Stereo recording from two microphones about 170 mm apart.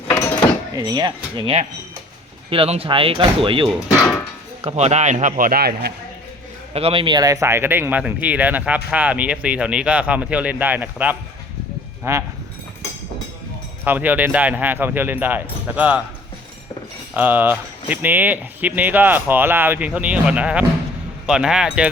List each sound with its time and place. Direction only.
0.1 s a sound: 10° left (ahead or behind)
0.8 s speech: 25° right (ahead or behind)
3.8 s speech: centre (ahead or behind)
4.6 s a man's voice: 40° right (ahead or behind); by 5.9 s 65° right (ahead or behind)
6.7 s speech: 35° right (ahead or behind); by 12.2 s 15° right (ahead or behind)
13.8 s speech: 10° right (ahead or behind)
17.2 s speech: 10° right (ahead or behind)